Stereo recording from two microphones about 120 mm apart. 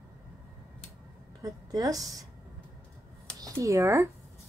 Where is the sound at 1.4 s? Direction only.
30° right (ahead or behind).